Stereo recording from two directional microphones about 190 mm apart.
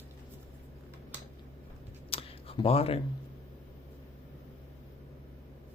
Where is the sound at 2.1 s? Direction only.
30° left (ahead or behind).